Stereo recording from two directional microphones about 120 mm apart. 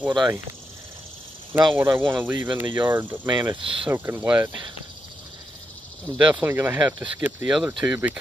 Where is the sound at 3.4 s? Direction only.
40° right (ahead or behind).